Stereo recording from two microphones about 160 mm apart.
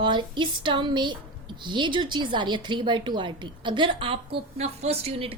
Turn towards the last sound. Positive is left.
turn(degrees=-35)  # may be behind; listen again after turning